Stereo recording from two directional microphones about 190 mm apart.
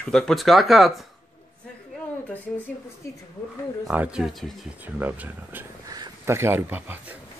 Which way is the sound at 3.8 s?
5° right (ahead or behind).